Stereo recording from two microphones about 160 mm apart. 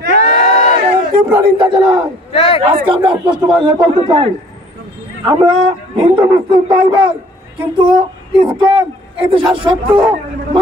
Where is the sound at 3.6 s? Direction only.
30° right (ahead or behind).